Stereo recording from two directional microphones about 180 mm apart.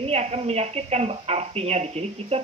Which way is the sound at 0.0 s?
35° right (ahead or behind).